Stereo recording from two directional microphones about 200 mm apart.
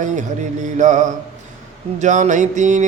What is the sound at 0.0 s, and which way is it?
Music, 40° right (ahead or behind).